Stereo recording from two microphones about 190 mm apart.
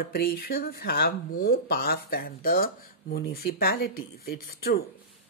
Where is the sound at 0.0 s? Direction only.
50° left (ahead or behind).